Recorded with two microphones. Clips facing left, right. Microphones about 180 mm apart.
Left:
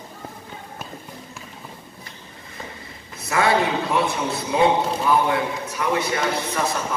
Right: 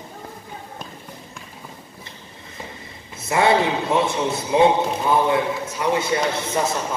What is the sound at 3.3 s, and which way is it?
Speech, 25° right (ahead or behind).